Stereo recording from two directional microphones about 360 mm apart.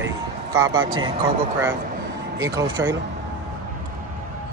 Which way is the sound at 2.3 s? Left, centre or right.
Centre.